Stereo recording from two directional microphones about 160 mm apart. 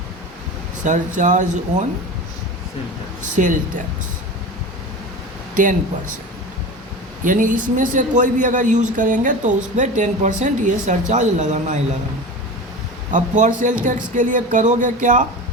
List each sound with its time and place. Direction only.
0.9 s a man's voice: 50° right (ahead or behind)
3.4 s a man's voice: 50° right (ahead or behind)
7.3 s a man's voice: 55° right (ahead or behind)
13.1 s a man's voice: 50° right (ahead or behind)